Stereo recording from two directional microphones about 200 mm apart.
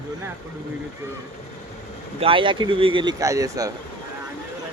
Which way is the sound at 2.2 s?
25° right (ahead or behind).